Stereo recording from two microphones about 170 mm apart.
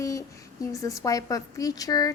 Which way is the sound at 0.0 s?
20° left (ahead or behind).